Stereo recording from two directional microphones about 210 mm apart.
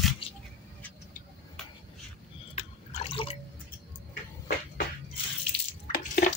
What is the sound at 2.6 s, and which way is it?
Water, 25° left (ahead or behind).